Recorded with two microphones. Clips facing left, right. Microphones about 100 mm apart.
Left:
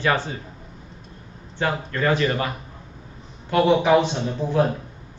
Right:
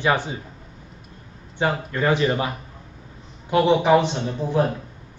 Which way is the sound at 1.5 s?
15° right (ahead or behind).